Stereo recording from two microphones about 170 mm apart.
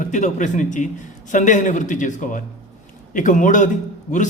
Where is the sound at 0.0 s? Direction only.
45° left (ahead or behind).